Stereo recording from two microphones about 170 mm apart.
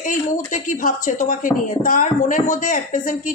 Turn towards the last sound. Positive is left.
turn(degrees=50)  # may be behind; listen again after turning